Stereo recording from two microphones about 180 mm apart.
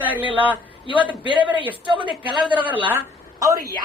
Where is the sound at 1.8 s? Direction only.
25° right (ahead or behind).